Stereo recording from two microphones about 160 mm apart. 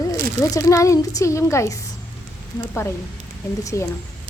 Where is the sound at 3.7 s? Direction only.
20° left (ahead or behind).